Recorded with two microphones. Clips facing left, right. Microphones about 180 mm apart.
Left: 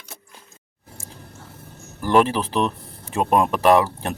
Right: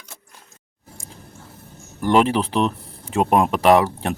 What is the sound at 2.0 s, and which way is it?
Speech, 15° right (ahead or behind).